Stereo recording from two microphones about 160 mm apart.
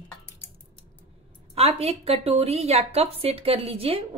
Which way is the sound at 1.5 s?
40° right (ahead or behind).